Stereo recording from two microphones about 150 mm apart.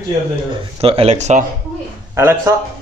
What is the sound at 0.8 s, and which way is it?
Speech, 40° right (ahead or behind).